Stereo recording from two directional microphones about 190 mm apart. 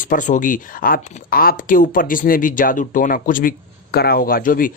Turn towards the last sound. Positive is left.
turn(degrees=45)  # may be behind; listen again after turning